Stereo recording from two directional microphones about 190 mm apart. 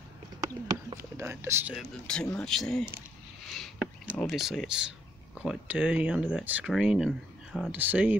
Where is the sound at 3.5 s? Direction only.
Centre (ahead or behind).